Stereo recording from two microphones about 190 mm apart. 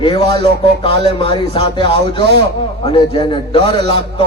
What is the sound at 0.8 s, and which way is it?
Speech, 25° left (ahead or behind).